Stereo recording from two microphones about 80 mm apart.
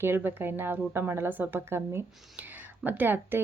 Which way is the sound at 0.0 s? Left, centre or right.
Right.